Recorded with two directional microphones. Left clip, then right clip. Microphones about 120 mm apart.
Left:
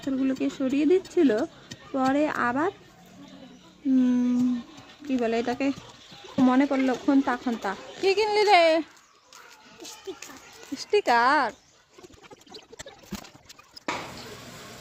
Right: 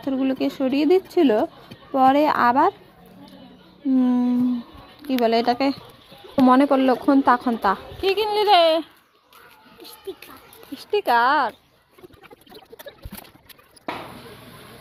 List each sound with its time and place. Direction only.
0.0 s a woman's voice: 15° right (ahead or behind)
3.9 s a woman's voice: 10° right (ahead or behind); by 6.9 s 30° right (ahead or behind)
7.0 s a woman's voice: 15° right (ahead or behind)
8.0 s speech: 5° left (ahead or behind)
10.1 s speech: 5° right (ahead or behind)
10.8 s speech: 15° left (ahead or behind)